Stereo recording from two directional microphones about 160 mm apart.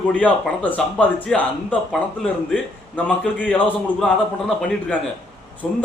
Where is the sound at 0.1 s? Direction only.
10° left (ahead or behind).